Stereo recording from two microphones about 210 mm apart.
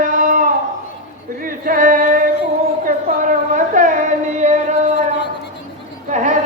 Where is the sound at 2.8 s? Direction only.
40° right (ahead or behind).